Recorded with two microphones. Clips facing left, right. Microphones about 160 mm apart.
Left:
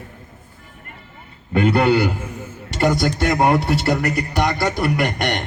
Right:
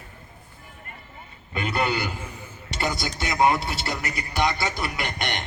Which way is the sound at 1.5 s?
60° left (ahead or behind).